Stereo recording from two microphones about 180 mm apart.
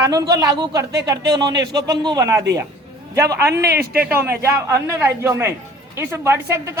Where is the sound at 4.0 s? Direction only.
10° right (ahead or behind).